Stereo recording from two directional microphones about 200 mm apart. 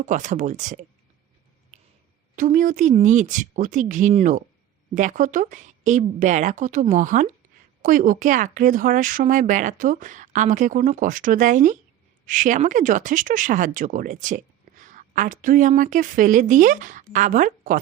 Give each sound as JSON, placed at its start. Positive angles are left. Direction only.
{"t": 0.0, "sound": "speech", "side_deg": -40}
{"t": 2.3, "sound": "speech", "side_deg": -40}